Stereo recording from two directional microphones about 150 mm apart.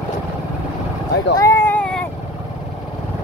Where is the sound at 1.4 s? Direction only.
20° left (ahead or behind).